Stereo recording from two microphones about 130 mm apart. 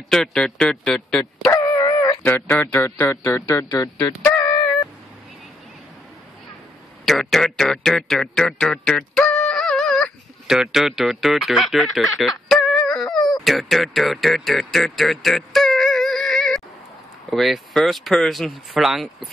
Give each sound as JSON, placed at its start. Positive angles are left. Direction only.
{"t": 0.1, "sound": "speech", "side_deg": 5}
{"t": 1.5, "sound": "dog", "side_deg": 30}
{"t": 2.2, "sound": "a man's voice", "side_deg": 15}
{"t": 7.1, "sound": "speech", "side_deg": 0}